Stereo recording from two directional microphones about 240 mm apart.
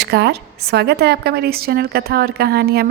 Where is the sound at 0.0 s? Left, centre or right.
Right.